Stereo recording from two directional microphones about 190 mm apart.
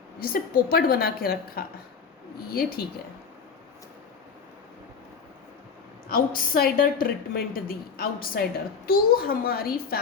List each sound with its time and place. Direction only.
0.2 s a woman's voice: 50° left (ahead or behind)
6.1 s a woman's voice: 50° left (ahead or behind)